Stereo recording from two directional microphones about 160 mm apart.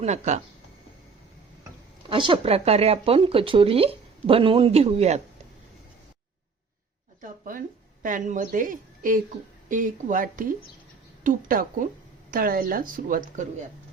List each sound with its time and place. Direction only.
0.0 s speech: 45° right (ahead or behind)
2.0 s speech: 30° right (ahead or behind)
7.2 s a sound: 60° right (ahead or behind)
8.0 s a woman's voice: 55° right (ahead or behind)